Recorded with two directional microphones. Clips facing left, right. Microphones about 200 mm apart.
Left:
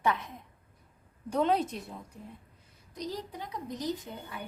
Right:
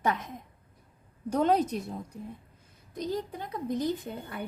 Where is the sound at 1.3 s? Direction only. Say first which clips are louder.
Right 3 dB; 40° right (ahead or behind).